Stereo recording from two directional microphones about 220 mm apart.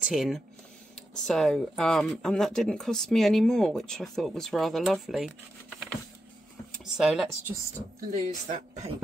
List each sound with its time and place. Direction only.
0.0 s speech: centre (ahead or behind)
8.5 s speech: 30° right (ahead or behind)